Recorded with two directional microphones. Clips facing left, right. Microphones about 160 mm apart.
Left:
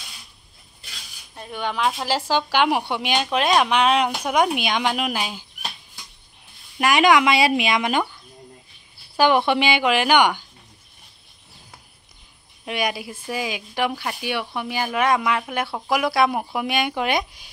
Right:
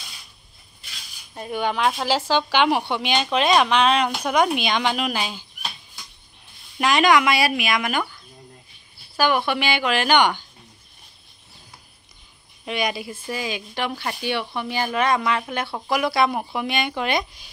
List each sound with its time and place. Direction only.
1.3 s speech: 10° right (ahead or behind); by 5.4 s 10° left (ahead or behind)
6.8 s speech: 15° left (ahead or behind)
9.1 s speech: 20° left (ahead or behind)
12.6 s speech: 10° left (ahead or behind)